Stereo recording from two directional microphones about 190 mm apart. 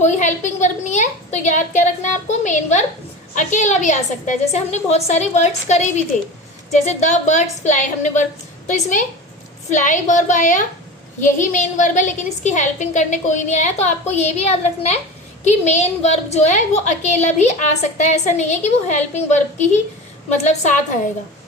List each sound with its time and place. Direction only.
0.0 s a woman's voice: 40° left (ahead or behind)